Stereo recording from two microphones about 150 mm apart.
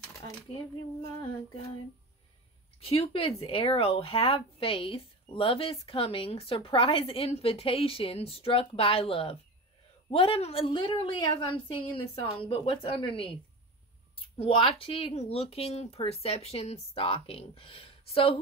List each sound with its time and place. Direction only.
2.8 s speech: 40° left (ahead or behind)